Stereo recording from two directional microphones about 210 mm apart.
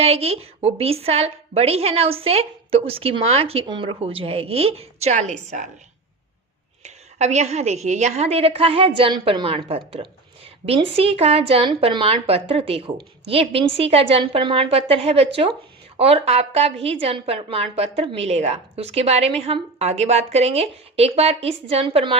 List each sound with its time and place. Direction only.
0.0 s a woman's voice: 30° right (ahead or behind)
6.8 s a woman's voice: 30° right (ahead or behind)